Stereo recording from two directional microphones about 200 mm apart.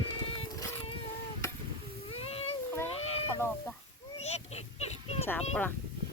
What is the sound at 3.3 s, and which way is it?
Speech, 10° left (ahead or behind).